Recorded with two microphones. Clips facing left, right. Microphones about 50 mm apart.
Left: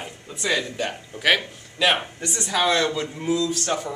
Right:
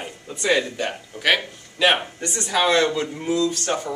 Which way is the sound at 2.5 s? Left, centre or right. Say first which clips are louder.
Right 2 dB; right.